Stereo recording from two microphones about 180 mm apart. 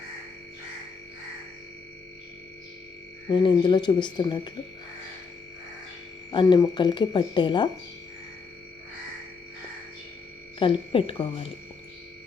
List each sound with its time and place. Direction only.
3.3 s speech: 25° left (ahead or behind)
6.3 s speech: 25° left (ahead or behind)
10.6 s speech: 30° left (ahead or behind)